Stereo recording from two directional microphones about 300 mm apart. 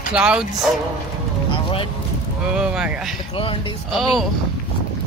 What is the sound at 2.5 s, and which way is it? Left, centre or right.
Speech, centre.